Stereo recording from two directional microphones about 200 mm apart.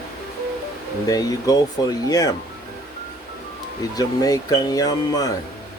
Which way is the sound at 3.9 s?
20° left (ahead or behind).